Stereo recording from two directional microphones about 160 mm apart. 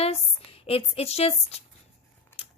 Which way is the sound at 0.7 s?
40° left (ahead or behind).